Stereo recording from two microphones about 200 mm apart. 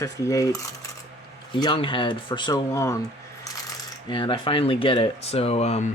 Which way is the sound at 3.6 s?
25° left (ahead or behind).